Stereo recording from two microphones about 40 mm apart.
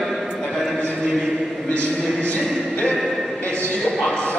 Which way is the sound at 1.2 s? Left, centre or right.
Centre.